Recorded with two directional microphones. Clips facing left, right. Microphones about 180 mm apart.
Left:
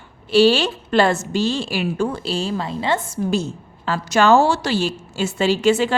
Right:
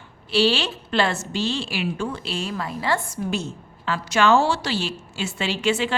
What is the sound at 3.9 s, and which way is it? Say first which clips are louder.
A woman's voice: left 4 dB; 40° left (ahead or behind).